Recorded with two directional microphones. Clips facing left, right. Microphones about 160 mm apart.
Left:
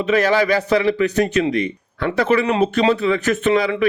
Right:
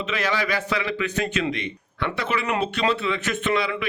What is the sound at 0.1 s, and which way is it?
A man's voice, 40° left (ahead or behind).